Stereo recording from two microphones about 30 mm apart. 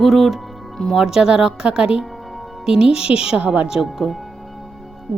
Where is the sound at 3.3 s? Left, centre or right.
Right.